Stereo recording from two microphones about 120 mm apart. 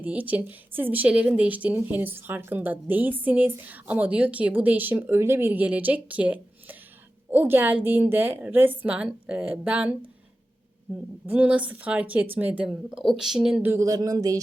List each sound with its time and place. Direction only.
0.0 s a woman's voice: 15° right (ahead or behind)
11.3 s a woman's voice: 10° right (ahead or behind)
13.6 s a sound: 20° right (ahead or behind)